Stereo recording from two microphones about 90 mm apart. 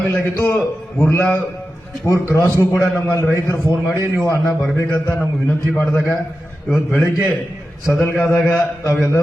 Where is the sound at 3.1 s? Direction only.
30° left (ahead or behind).